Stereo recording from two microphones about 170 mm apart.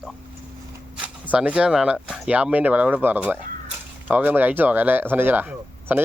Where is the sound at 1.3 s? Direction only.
5° right (ahead or behind).